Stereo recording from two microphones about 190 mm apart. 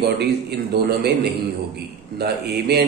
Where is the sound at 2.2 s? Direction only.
60° right (ahead or behind).